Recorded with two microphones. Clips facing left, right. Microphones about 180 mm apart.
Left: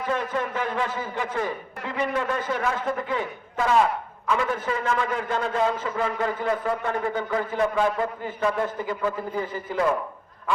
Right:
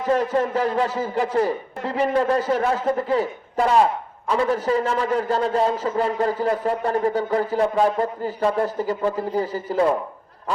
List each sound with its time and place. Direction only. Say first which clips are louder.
0.0 s a man's voice: right 6 dB; 40° right (ahead or behind)